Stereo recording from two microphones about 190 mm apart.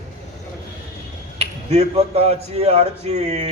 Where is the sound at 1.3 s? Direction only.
35° right (ahead or behind).